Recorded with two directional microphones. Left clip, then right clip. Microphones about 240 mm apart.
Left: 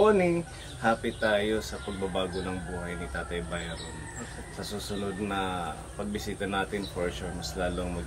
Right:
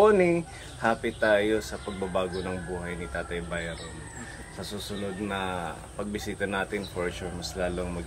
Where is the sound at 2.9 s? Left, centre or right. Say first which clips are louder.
Right 1 dB; centre.